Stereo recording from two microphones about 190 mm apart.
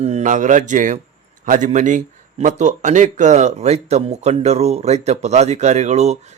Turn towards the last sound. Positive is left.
turn(degrees=-35)  # may be behind; listen again after turning